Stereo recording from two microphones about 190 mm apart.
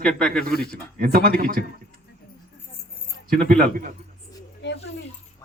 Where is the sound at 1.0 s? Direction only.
50° right (ahead or behind).